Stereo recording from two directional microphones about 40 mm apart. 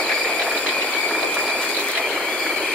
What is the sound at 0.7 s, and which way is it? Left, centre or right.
Ratchet, left.